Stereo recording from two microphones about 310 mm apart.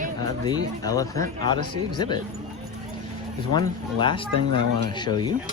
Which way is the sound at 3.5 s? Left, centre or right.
Centre.